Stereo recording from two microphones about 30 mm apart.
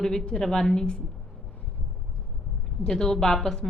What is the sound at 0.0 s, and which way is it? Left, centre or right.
A woman's voice, centre.